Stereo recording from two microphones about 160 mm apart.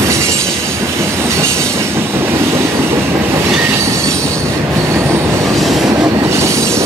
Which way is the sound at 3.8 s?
20° right (ahead or behind).